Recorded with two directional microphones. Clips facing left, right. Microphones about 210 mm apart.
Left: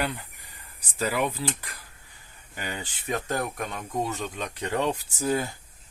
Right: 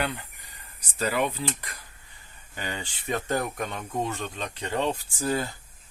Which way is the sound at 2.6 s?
10° left (ahead or behind).